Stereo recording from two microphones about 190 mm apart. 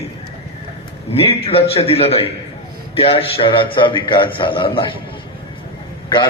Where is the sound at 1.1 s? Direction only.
30° left (ahead or behind).